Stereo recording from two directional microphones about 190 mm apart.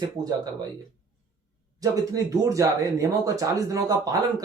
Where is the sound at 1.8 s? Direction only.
20° right (ahead or behind).